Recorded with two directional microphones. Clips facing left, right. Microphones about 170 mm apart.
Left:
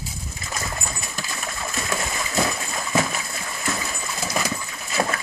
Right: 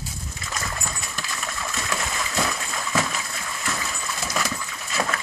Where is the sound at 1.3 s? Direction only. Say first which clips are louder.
Left 1 dB; 20° left (ahead or behind).